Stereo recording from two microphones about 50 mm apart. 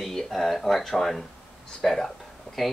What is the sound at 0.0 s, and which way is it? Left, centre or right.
Speech, centre.